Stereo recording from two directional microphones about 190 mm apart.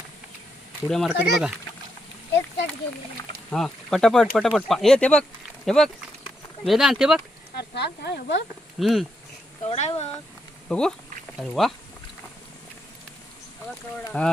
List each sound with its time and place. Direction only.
0.9 s speech: centre (ahead or behind)
3.5 s speech: centre (ahead or behind)
7.5 s speech: 60° left (ahead or behind)
8.8 s speech: centre (ahead or behind)
9.6 s speech: 35° left (ahead or behind)
10.7 s speech: 5° left (ahead or behind)
14.1 s speech: 5° left (ahead or behind)